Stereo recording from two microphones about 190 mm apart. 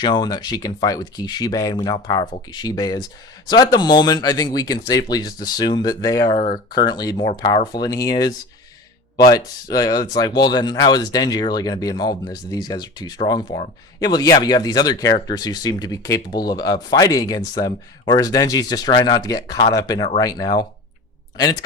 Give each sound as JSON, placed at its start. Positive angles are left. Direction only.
{"t": 0.0, "sound": "speech", "side_deg": 20}